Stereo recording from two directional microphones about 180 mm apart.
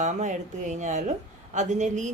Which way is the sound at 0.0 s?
40° right (ahead or behind).